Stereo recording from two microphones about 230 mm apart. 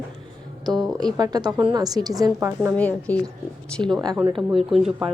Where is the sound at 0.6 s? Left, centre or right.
Centre.